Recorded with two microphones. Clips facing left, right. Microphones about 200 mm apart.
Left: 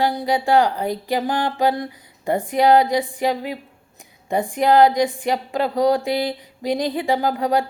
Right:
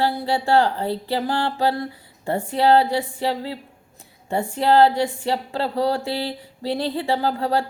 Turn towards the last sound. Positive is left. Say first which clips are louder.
# left 2 dB
turn(degrees=15)  # may be behind; listen again after turning